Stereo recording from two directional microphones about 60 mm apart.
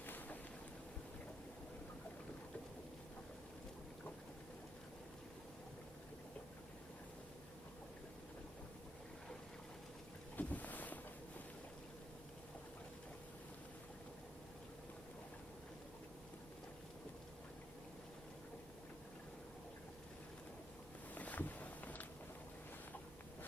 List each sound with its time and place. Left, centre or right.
0.0 s boat: left
10.3 s boat: left
21.2 s a sound: left